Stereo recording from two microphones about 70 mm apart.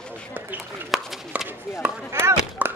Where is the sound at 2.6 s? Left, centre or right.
Right.